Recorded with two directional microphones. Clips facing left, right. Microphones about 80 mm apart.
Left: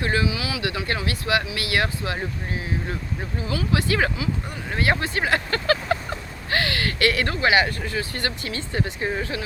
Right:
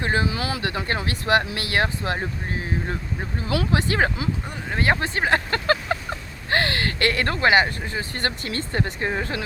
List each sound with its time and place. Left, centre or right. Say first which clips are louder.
0.0 s speech: even; right
0.3 s speech: right 1 dB; right
0.6 s speech: even; right
6.5 s a sound: right 2 dB; right
7.8 s speech: left 1 dB; right
8.2 s speech: right 2 dB; right